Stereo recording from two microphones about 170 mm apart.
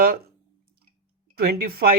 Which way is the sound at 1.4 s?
65° right (ahead or behind).